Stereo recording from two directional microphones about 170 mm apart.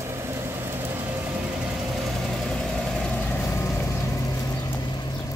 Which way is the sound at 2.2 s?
5° left (ahead or behind).